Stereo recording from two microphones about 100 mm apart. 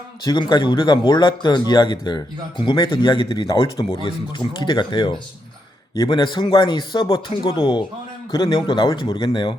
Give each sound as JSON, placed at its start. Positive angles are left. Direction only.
{"t": 0.3, "sound": "speech", "side_deg": 45}